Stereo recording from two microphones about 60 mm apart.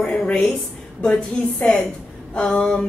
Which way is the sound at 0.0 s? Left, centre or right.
Centre.